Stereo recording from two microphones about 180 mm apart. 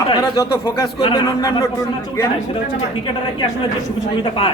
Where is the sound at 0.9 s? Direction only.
30° left (ahead or behind).